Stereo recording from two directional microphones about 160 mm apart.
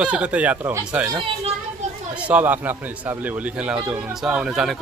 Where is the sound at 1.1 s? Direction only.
35° right (ahead or behind).